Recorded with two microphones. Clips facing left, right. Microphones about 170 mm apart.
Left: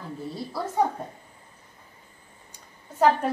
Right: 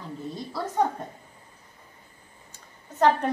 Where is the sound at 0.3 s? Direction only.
5° left (ahead or behind).